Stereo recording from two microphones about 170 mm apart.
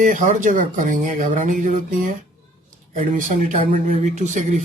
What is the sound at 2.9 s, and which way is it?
Speech, 50° right (ahead or behind).